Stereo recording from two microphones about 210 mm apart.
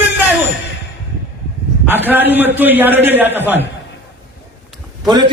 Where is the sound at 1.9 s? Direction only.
10° right (ahead or behind).